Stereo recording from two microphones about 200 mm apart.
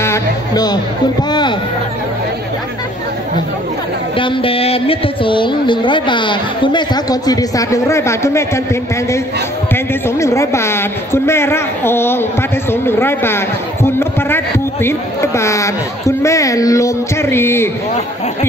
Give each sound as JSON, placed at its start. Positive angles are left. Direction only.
{"t": 0.0, "sound": "music", "side_deg": 15}
{"t": 4.2, "sound": "speech", "side_deg": 25}
{"t": 10.0, "sound": "a man's voice", "side_deg": 15}